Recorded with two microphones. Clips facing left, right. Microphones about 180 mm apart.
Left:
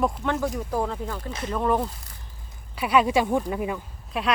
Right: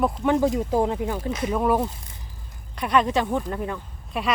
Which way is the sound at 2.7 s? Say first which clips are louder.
Left 1 dB; 10° left (ahead or behind).